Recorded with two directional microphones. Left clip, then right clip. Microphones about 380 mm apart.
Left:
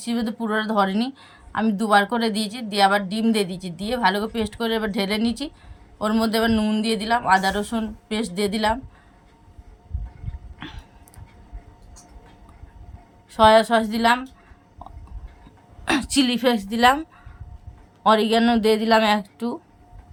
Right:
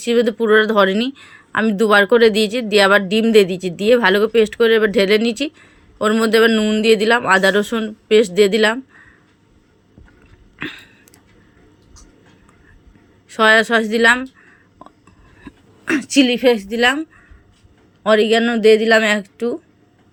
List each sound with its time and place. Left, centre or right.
0.0 s speech: centre
13.3 s speech: centre
16.0 s speech: centre